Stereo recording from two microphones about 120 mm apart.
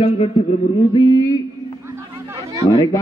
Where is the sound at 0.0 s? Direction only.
55° left (ahead or behind).